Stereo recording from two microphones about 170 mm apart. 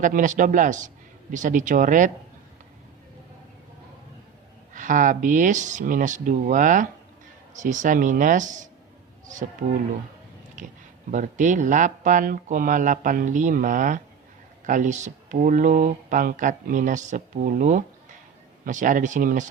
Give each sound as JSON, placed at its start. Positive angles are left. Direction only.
{"t": 0.0, "sound": "speech", "side_deg": -50}
{"t": 4.7, "sound": "speech", "side_deg": -50}
{"t": 11.1, "sound": "speech", "side_deg": -50}